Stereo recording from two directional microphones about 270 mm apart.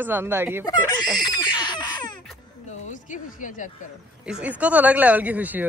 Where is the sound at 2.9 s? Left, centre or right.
Left.